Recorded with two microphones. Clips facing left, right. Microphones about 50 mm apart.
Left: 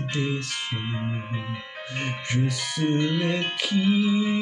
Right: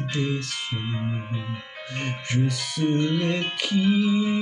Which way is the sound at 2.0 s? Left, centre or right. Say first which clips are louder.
Right 1 dB; centre.